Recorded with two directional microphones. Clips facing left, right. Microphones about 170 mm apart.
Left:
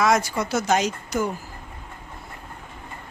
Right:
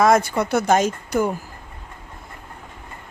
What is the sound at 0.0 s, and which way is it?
Speech, 55° right (ahead or behind).